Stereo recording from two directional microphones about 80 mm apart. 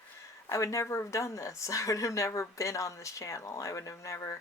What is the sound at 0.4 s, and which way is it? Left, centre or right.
Speech, left.